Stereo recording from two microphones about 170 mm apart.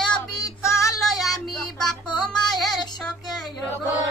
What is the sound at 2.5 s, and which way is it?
Child singing, centre (ahead or behind).